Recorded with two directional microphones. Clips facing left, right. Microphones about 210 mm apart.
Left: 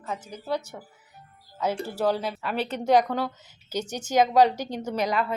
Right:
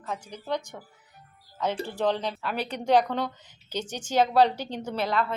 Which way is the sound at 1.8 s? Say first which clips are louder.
Left 1 dB; 10° left (ahead or behind).